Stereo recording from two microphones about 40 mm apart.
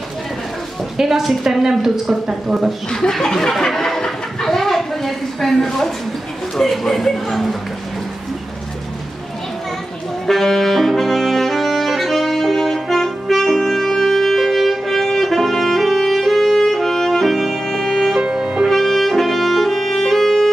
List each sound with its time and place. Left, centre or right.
0.9 s speech: centre
2.9 s a sound: centre
6.5 s speech: centre
10.2 s saxophone: centre
18.1 s music: centre
18.7 s music: centre